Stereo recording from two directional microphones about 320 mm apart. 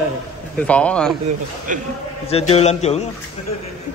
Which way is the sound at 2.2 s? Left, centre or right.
Centre.